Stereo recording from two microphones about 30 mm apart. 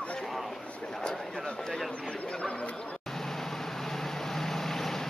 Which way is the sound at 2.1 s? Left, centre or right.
Left.